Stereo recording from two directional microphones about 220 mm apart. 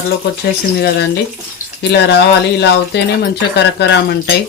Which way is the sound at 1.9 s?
50° left (ahead or behind).